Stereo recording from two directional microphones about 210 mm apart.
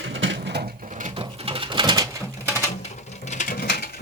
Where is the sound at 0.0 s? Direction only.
60° right (ahead or behind); by 2.6 s 15° right (ahead or behind).